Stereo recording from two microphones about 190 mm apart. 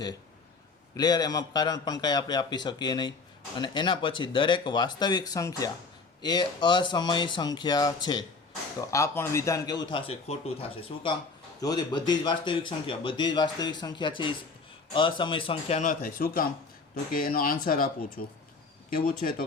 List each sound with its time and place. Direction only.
0.9 s a man's voice: 20° left (ahead or behind)
9.9 s speech: 30° left (ahead or behind)
15.8 s speech: 45° left (ahead or behind)